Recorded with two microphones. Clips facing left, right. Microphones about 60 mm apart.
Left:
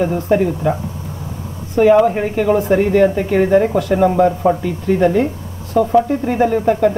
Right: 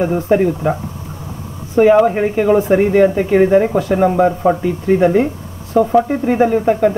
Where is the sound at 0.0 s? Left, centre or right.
Centre.